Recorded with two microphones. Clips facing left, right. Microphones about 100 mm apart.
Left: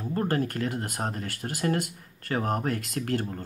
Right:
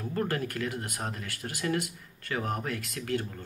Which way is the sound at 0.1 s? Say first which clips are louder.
Left 4 dB; 35° left (ahead or behind).